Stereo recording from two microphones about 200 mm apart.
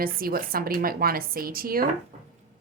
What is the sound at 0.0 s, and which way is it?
A woman's voice, 45° right (ahead or behind).